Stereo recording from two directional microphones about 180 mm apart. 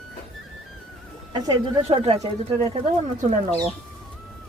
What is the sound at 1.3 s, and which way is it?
Speech, 25° right (ahead or behind).